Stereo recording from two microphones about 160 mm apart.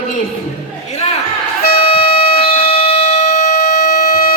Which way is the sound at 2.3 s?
35° left (ahead or behind).